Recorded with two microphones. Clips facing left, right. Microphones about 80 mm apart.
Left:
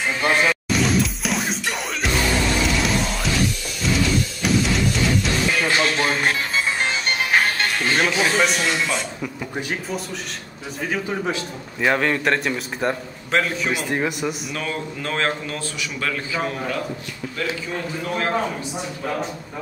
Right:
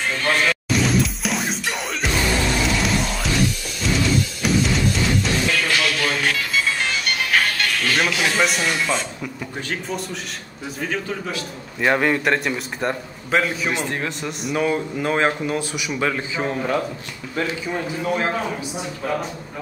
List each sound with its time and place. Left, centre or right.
0.2 s music: centre
0.7 s music: centre
2.8 s music: centre
5.5 s music: left
8.1 s speech: left
8.4 s a man's voice: centre
8.9 s speech: centre
11.8 s a man's voice: centre
13.7 s speech: centre
14.5 s a man's voice: centre
17.7 s a man's voice: centre